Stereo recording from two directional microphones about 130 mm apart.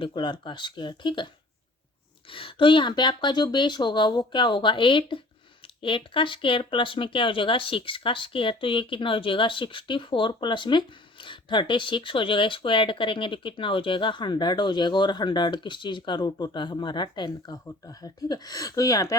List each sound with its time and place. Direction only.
0.0 s speech: 40° left (ahead or behind)
2.3 s speech: 40° left (ahead or behind); by 19.1 s 25° left (ahead or behind)